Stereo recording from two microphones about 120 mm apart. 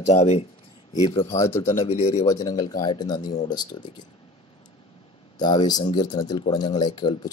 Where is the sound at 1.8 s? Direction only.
60° left (ahead or behind).